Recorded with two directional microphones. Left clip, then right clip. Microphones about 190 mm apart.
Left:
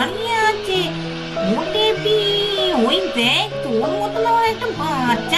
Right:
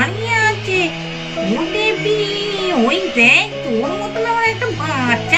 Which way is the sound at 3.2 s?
35° left (ahead or behind).